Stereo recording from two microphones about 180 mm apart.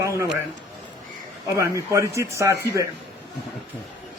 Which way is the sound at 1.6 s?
15° right (ahead or behind).